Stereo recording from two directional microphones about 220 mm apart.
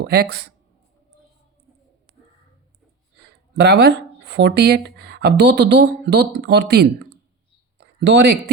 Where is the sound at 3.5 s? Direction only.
50° right (ahead or behind).